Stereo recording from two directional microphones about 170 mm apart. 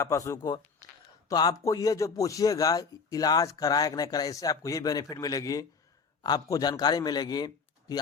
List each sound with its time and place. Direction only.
0.0 s a man's voice: 20° left (ahead or behind)